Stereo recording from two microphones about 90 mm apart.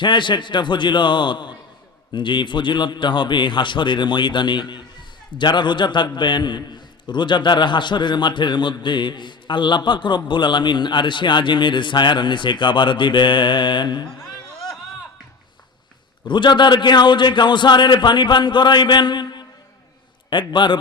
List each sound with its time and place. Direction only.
0.0 s a man's voice: 60° left (ahead or behind)
16.3 s a man's voice: 60° left (ahead or behind)
20.5 s a man's voice: 60° left (ahead or behind)